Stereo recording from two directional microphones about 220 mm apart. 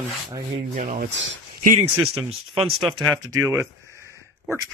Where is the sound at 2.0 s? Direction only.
5° right (ahead or behind).